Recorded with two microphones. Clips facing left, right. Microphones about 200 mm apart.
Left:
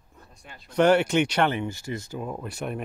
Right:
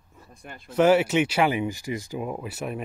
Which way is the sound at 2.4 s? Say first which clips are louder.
Even; 5° right (ahead or behind).